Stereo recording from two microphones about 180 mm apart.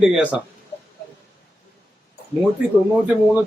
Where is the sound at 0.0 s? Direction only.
5° right (ahead or behind).